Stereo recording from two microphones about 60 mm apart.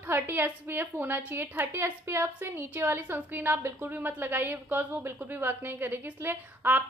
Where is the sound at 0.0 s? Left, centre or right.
Right.